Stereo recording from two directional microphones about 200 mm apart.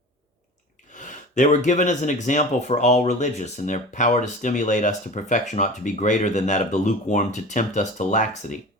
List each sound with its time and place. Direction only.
0.9 s speech: 40° left (ahead or behind)